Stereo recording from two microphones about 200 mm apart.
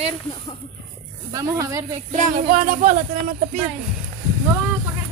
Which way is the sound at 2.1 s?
40° right (ahead or behind).